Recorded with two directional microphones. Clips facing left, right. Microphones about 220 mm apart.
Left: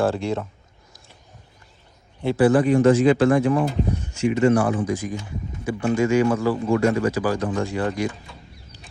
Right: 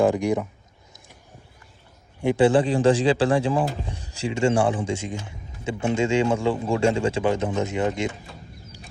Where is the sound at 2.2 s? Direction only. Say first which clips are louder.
Even; 15° right (ahead or behind).